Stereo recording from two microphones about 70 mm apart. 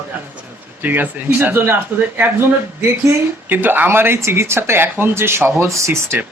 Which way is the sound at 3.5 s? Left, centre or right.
Right.